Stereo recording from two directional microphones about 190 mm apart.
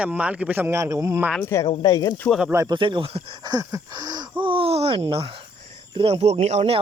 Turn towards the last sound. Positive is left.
turn(degrees=-35)  # may be behind; listen again after turning